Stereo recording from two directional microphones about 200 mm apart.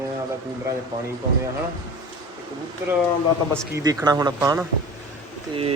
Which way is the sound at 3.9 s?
20° right (ahead or behind).